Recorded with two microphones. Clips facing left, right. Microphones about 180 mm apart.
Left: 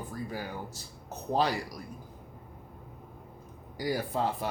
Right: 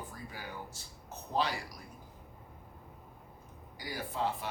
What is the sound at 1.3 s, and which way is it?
Speech, 40° left (ahead or behind).